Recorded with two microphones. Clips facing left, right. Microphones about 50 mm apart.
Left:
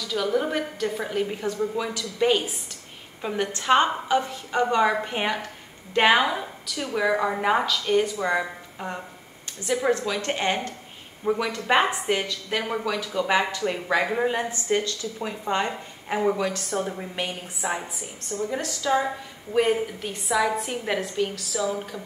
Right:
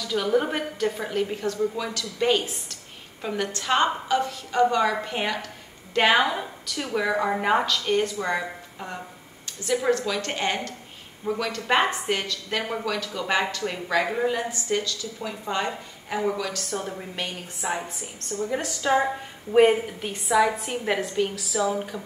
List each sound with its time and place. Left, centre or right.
0.1 s a woman's voice: centre
0.9 s a woman's voice: centre
6.1 s a woman's voice: centre
10.0 s a woman's voice: centre
13.8 s speech: left
16.7 s a woman's voice: centre
18.4 s a woman's voice: centre
18.8 s a woman's voice: right
19.5 s a woman's voice: centre
20.1 s a woman's voice: centre